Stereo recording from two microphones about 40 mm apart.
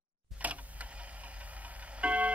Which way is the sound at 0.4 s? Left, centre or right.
Right.